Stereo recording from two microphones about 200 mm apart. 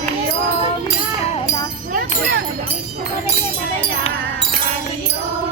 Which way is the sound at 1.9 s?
50° right (ahead or behind).